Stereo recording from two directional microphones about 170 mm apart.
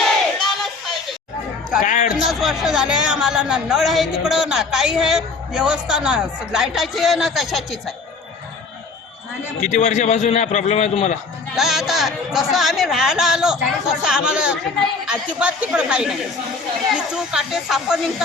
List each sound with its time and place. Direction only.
0.0 s a sound: centre (ahead or behind)
1.8 s speech: 50° left (ahead or behind)
2.1 s speech: centre (ahead or behind)
9.6 s a man's voice: 45° left (ahead or behind)
11.5 s speech: centre (ahead or behind)
17.3 s speech: 5° right (ahead or behind)